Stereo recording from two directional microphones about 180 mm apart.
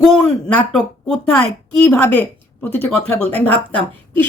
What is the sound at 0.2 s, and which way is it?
A woman's voice, 5° left (ahead or behind).